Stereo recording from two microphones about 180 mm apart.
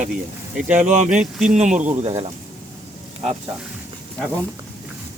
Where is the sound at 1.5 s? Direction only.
40° right (ahead or behind).